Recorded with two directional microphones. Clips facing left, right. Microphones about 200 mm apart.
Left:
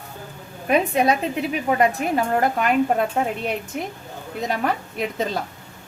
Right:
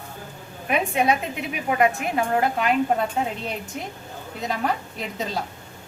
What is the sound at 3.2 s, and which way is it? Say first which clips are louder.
Speech: left 3 dB; 55° left (ahead or behind).